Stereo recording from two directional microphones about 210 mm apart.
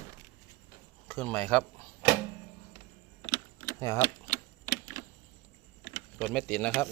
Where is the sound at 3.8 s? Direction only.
15° left (ahead or behind).